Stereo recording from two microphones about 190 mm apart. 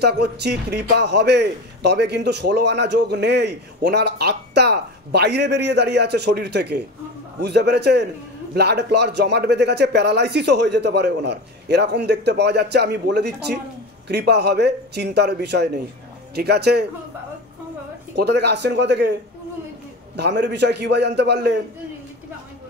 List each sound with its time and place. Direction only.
0.0 s a man's voice: 60° right (ahead or behind)
18.1 s a man's voice: 60° right (ahead or behind)
20.2 s a man's voice: 65° right (ahead or behind)